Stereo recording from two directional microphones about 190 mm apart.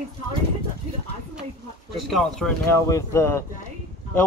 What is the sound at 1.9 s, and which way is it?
Speech, centre (ahead or behind).